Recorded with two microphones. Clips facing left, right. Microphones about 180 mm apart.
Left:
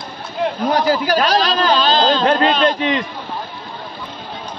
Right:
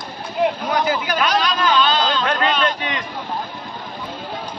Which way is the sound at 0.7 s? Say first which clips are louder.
Left 4 dB; 35° left (ahead or behind).